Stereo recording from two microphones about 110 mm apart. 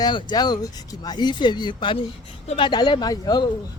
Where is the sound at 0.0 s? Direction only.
45° left (ahead or behind).